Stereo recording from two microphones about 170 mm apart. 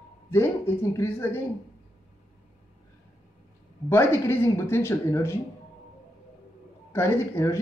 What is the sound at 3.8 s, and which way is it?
Speech, 15° left (ahead or behind).